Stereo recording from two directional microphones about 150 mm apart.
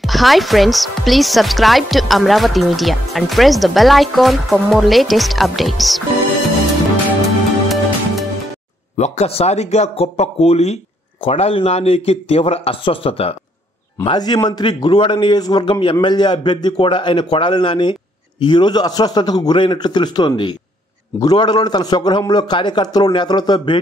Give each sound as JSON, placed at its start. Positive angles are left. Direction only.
{"t": 0.0, "sound": "speech", "side_deg": 0}
{"t": 7.6, "sound": "music", "side_deg": 0}
{"t": 8.9, "sound": "a man's voice", "side_deg": 50}
{"t": 14.0, "sound": "a man's voice", "side_deg": 25}